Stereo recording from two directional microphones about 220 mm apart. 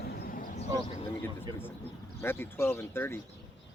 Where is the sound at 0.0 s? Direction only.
45° left (ahead or behind).